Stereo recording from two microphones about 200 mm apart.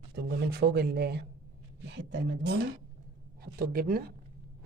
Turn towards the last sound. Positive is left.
turn(degrees=-45)  # may be behind; listen again after turning